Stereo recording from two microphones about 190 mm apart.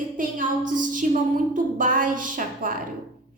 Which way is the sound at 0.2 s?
45° right (ahead or behind).